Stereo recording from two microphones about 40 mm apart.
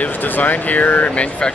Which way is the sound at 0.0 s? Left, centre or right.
Left.